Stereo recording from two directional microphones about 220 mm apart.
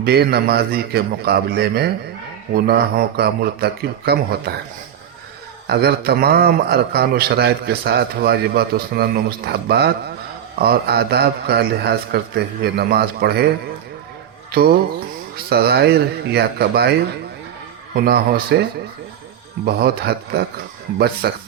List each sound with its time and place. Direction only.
0.0 s a man's voice: 45° right (ahead or behind)
5.6 s a man's voice: 45° right (ahead or behind)
15.4 s a man's voice: 45° right (ahead or behind)
17.9 s a man's voice: 45° right (ahead or behind)
19.6 s a man's voice: 45° right (ahead or behind)